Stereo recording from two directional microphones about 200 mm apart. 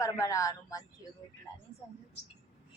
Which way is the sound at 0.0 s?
15° left (ahead or behind).